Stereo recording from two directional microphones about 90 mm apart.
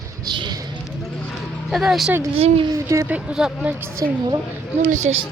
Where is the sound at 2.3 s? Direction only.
90° right.